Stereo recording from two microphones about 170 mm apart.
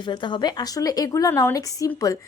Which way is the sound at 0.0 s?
25° left (ahead or behind).